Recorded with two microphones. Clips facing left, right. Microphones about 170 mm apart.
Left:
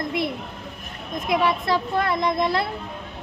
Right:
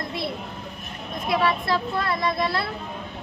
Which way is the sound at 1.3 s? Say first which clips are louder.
Left 1 dB; 15° left (ahead or behind).